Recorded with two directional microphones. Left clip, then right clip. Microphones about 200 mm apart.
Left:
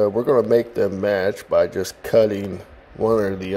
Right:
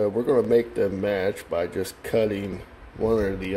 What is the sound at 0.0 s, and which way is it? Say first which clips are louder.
Speech: left 4 dB; 25° left (ahead or behind).